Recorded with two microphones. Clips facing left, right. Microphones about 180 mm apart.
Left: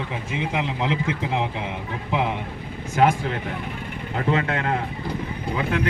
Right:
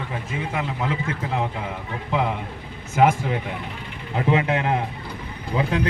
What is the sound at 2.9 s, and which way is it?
Speech, 5° right (ahead or behind).